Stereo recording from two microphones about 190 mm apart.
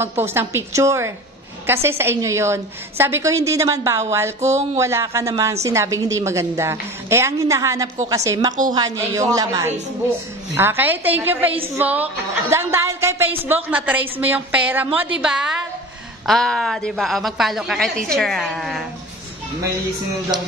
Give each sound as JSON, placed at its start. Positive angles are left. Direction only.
{"t": 0.0, "sound": "a woman's voice", "side_deg": -10}
{"t": 20.3, "sound": "a woman's voice", "side_deg": -5}